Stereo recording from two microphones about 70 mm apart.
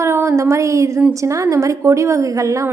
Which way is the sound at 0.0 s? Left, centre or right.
Right.